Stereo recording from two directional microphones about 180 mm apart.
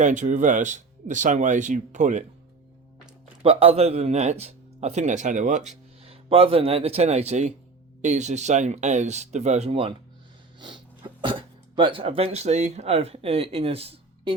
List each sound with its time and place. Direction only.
0.0 s speech: 45° right (ahead or behind)
3.4 s speech: 30° right (ahead or behind)